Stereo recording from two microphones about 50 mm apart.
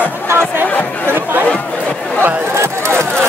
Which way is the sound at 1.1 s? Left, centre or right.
Right.